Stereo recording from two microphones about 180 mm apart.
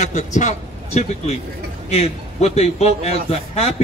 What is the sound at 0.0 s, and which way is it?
A man's voice, 40° left (ahead or behind).